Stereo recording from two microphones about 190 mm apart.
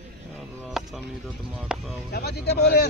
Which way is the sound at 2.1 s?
60° left (ahead or behind).